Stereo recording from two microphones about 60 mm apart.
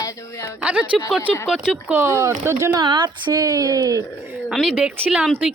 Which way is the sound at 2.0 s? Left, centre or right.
Right.